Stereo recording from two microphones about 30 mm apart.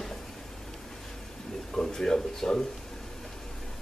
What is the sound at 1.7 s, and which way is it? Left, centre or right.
Speech, centre.